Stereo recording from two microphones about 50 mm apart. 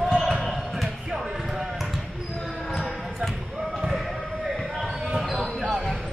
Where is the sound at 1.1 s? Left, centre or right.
Centre.